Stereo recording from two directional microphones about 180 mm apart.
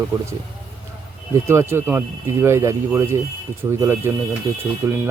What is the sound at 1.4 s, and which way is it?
Speech, 15° right (ahead or behind).